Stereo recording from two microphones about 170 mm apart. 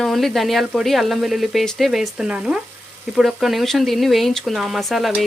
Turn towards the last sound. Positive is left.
turn(degrees=0)  # may be behind; listen again after turning